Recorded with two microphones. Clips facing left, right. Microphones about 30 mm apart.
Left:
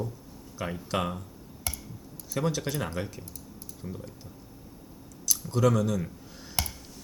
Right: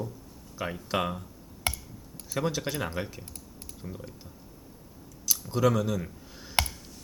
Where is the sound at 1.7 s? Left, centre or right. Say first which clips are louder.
Right 6 dB; right.